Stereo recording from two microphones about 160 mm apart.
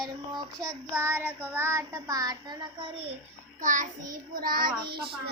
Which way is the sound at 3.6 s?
50° right (ahead or behind).